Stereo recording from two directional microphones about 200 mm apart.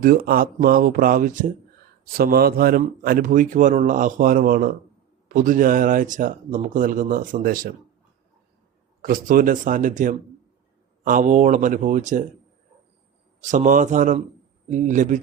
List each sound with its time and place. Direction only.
0.0 s a man's voice: 45° right (ahead or behind)
9.0 s a man's voice: 45° right (ahead or behind)
13.4 s speech: 40° right (ahead or behind)